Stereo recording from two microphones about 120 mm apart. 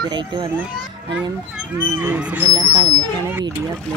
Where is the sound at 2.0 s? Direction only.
15° right (ahead or behind).